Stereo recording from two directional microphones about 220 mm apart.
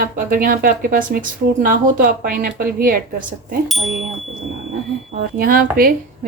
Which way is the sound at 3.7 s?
Centre (ahead or behind).